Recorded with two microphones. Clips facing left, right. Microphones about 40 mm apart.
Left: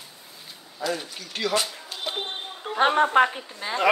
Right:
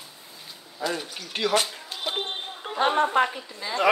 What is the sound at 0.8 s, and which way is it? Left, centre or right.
Speech, centre.